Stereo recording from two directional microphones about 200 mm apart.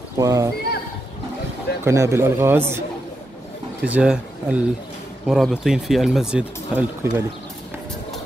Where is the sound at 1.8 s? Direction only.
15° right (ahead or behind).